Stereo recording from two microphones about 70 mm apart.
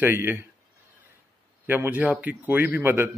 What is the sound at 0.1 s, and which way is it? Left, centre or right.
Speech, right.